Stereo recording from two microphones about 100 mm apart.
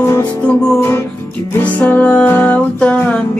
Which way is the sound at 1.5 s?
15° left (ahead or behind).